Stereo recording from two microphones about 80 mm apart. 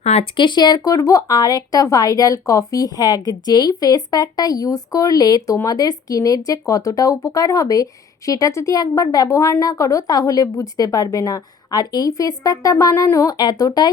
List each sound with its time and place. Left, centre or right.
0.3 s speech: left
0.9 s speech: left
13.3 s speech: left